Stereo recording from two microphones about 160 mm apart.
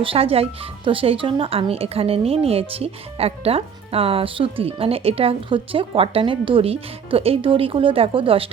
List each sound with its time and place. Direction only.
0.0 s speech: 35° right (ahead or behind)